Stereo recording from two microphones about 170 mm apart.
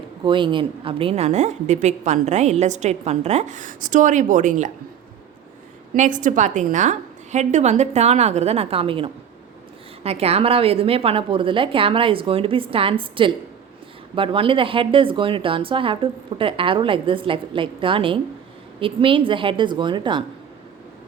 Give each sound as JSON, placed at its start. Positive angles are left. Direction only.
{"t": 0.3, "sound": "a woman's voice", "side_deg": -30}
{"t": 5.9, "sound": "a woman's voice", "side_deg": -50}